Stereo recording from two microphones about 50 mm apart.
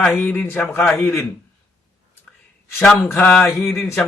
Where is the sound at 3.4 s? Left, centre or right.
Left.